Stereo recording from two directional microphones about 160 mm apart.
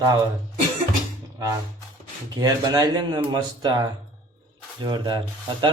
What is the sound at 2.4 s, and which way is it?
Speech, 25° right (ahead or behind).